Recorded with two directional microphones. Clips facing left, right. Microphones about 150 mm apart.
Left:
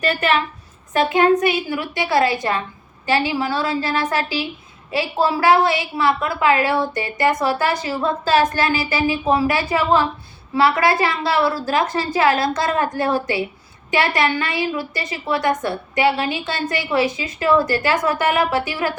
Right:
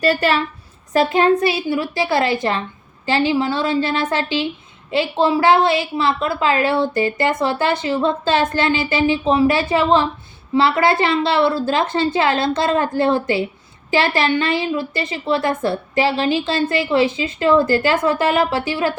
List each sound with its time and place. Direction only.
0.0 s a child's voice: 30° right (ahead or behind)